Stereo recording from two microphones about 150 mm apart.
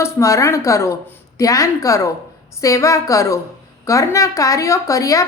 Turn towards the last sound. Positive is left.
turn(degrees=20)  # may be behind; listen again after turning